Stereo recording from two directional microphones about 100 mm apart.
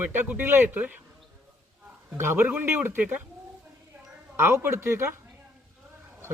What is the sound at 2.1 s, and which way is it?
Speech, 25° right (ahead or behind).